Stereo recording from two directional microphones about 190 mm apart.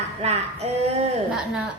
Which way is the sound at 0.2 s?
35° right (ahead or behind).